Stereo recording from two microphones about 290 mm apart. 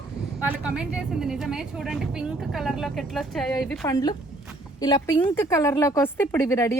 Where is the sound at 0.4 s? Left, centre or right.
Centre.